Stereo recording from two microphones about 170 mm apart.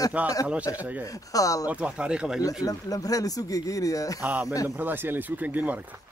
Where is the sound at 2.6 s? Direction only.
20° left (ahead or behind).